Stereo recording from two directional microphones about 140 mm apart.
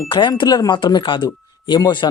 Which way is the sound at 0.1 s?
35° left (ahead or behind).